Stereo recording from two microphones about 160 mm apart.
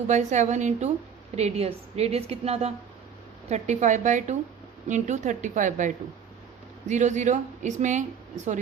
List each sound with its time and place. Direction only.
0.1 s a woman's voice: 50° right (ahead or behind)